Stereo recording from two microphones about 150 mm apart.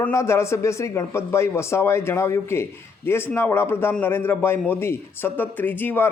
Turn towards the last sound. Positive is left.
turn(degrees=15)  # may be behind; listen again after turning